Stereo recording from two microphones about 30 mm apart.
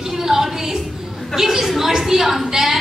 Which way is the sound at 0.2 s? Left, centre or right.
Centre.